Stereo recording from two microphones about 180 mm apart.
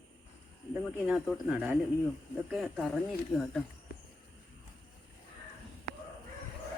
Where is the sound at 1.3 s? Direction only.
5° right (ahead or behind).